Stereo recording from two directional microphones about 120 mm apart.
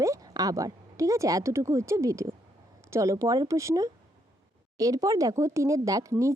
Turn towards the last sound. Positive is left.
turn(degrees=-25)  # may be behind; listen again after turning